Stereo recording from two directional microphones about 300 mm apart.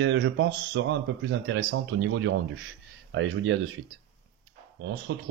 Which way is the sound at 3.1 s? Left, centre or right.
Right.